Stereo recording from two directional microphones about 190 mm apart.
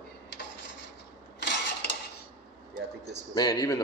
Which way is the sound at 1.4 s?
65° left (ahead or behind).